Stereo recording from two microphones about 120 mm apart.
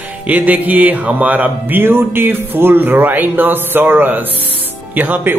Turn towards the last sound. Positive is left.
turn(degrees=-15)  # may be behind; listen again after turning